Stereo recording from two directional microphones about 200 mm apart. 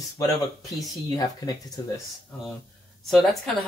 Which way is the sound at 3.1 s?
Centre (ahead or behind).